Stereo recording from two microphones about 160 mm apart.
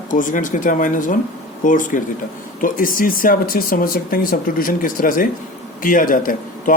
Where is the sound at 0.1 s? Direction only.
55° left (ahead or behind).